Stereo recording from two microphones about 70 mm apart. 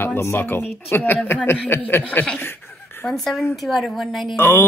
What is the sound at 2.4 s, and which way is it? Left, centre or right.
Chuckle, left.